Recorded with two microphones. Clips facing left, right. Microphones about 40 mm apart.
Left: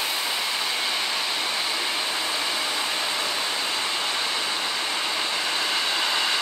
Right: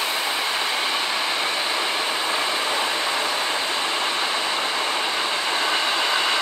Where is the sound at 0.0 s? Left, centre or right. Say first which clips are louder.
Right 3 dB; right.